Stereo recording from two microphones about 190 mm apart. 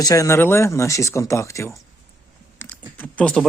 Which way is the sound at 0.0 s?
15° left (ahead or behind).